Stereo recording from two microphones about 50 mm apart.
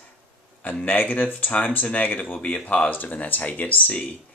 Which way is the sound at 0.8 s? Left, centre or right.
Left.